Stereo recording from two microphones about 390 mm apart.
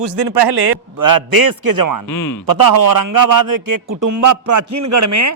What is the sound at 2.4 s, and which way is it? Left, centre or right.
A man's voice, right.